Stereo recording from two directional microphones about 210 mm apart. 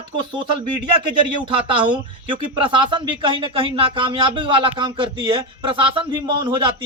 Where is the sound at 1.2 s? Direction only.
25° right (ahead or behind).